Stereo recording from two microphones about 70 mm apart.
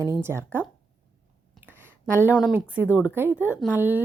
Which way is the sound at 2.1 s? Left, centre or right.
Right.